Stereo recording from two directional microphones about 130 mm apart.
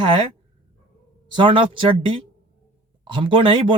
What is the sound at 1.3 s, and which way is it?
Speech, 40° right (ahead or behind).